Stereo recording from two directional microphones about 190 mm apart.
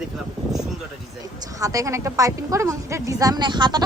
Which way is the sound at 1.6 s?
15° right (ahead or behind).